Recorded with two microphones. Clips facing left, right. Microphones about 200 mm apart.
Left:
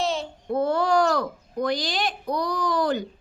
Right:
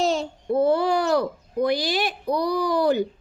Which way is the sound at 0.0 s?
40° right (ahead or behind).